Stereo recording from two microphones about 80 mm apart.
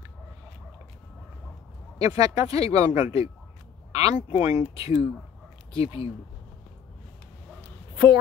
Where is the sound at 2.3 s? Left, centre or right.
Right.